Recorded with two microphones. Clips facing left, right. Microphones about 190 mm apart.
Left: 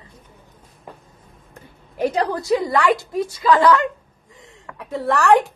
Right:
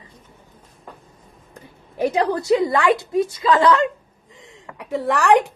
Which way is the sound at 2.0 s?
25° right (ahead or behind).